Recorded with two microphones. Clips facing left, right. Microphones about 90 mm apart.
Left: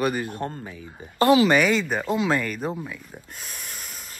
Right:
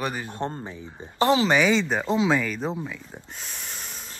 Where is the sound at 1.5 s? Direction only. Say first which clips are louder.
Even; 5° left (ahead or behind).